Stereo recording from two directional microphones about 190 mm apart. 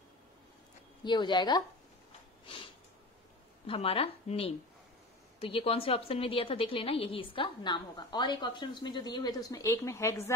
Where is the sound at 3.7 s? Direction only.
30° left (ahead or behind); by 10.2 s 15° left (ahead or behind).